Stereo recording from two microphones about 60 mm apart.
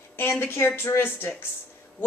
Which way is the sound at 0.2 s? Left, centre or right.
Left.